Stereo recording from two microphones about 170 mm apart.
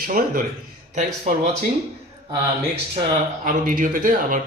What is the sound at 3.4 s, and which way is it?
Speech, 50° right (ahead or behind).